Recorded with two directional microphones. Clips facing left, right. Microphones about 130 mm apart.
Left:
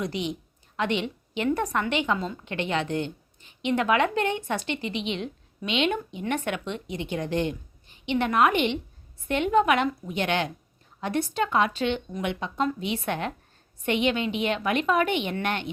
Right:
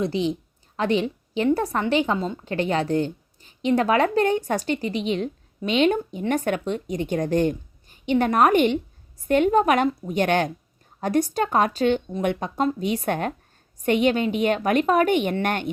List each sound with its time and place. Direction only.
0.0 s a woman's voice: 30° right (ahead or behind)